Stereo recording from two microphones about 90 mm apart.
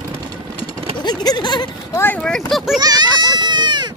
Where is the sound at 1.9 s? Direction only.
25° left (ahead or behind).